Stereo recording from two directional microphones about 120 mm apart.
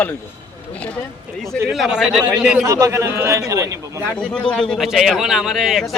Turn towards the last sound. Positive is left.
turn(degrees=0)  # may be behind; listen again after turning